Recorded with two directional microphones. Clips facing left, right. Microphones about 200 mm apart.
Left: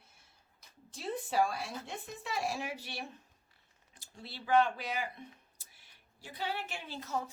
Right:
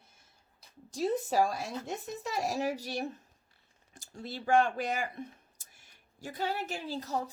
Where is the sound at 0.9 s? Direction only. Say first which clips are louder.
Right 4 dB; 40° right (ahead or behind).